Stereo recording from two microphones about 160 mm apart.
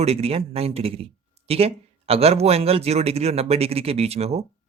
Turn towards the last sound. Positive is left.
turn(degrees=-40)  # may be behind; listen again after turning